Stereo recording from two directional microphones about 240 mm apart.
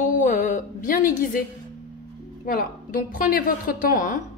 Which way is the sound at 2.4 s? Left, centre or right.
Left.